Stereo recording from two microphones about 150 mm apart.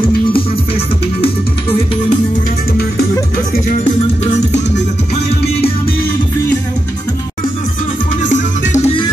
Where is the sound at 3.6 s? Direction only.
60° left (ahead or behind).